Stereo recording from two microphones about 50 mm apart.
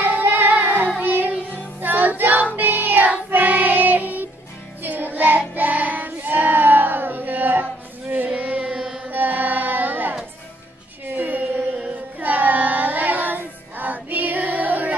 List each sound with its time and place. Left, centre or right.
0.0 s child singing: right
1.8 s music: right
2.5 s child singing: right
4.8 s music: right
5.5 s child singing: right
7.6 s a sound: right
8.4 s carnatic music: right
8.7 s carnatic music: centre
9.1 s child singing: right